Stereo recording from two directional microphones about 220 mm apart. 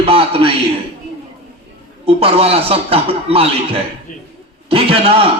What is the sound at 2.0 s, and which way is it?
A man's voice, 25° right (ahead or behind).